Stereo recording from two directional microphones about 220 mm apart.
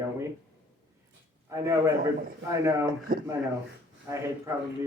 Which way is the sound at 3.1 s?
40° right (ahead or behind).